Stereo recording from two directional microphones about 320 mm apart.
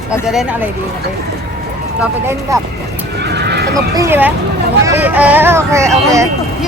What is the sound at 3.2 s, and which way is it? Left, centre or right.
Neigh, right.